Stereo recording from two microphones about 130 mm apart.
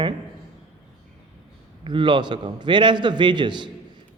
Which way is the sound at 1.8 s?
40° right (ahead or behind).